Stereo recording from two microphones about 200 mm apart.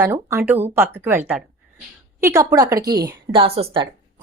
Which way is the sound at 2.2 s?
15° right (ahead or behind).